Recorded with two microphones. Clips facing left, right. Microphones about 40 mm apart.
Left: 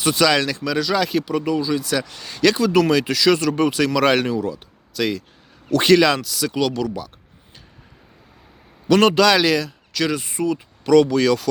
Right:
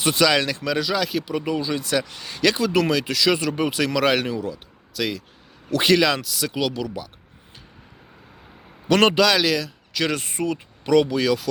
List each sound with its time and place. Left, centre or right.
0.2 s speech: centre
0.9 s speech: centre
1.2 s speech: centre
1.5 s speech: right
2.0 s speech: centre
2.9 s speech: centre
3.3 s speech: centre
6.1 s speech: centre
8.9 s speech: right
9.2 s speech: centre
10.1 s speech: right
10.8 s speech: centre